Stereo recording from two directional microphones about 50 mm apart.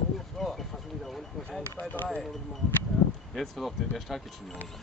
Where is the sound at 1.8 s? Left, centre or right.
Left.